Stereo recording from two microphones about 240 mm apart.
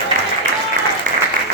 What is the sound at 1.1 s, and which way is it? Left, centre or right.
Applause, right.